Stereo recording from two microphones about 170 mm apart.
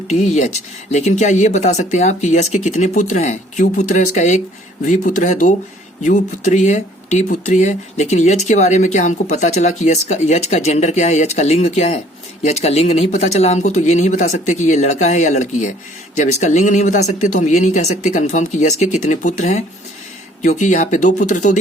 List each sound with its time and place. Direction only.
0.1 s speech: 45° left (ahead or behind)